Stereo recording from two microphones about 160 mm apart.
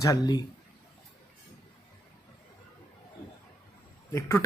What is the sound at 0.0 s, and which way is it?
Speech, 20° left (ahead or behind).